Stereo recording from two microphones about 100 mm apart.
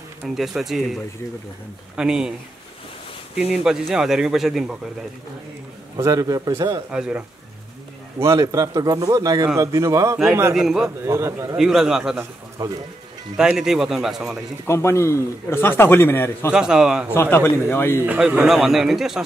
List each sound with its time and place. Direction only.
0.3 s speech: 5° right (ahead or behind)
2.0 s a man's voice: 5° right (ahead or behind)
3.3 s speech: 5° right (ahead or behind)
5.9 s a man's voice: 35° right (ahead or behind)
6.9 s a man's voice: 10° right (ahead or behind)
8.2 s a man's voice: 30° right (ahead or behind)
10.5 s speech: 5° right (ahead or behind)
11.1 s speech: 25° right (ahead or behind)
11.5 s speech: 5° right (ahead or behind)
13.4 s speech: 5° right (ahead or behind)
14.7 s a man's voice: 25° left (ahead or behind)
16.5 s a man's voice: 5° right (ahead or behind)
17.1 s a man's voice: 25° left (ahead or behind)
18.0 s speech: 15° right (ahead or behind)